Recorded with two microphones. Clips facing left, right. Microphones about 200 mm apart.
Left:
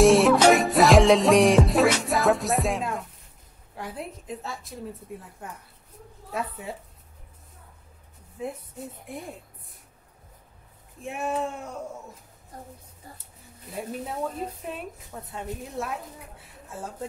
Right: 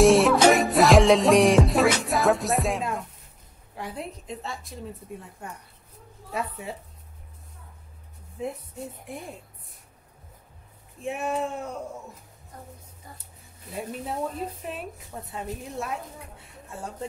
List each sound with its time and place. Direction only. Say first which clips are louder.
0.0 s music: even; centre (ahead or behind)
3.7 s a woman's voice: right 1 dB; centre (ahead or behind)
9.1 s a woman's voice: left 2 dB; centre (ahead or behind)
11.0 s a woman's voice: right 1 dB; centre (ahead or behind)
15.2 s a woman's voice: even; centre (ahead or behind)